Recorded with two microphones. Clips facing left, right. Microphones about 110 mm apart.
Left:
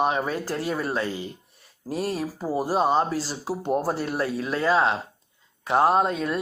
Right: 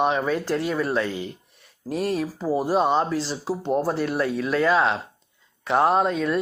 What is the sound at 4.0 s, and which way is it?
Speech, 40° left (ahead or behind).